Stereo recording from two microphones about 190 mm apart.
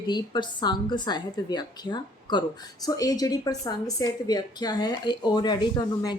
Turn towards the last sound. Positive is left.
turn(degrees=20)  # may be behind; listen again after turning